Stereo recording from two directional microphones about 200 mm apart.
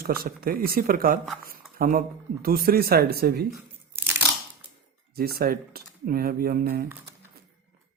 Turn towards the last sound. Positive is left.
turn(degrees=-50)  # may be behind; listen again after turning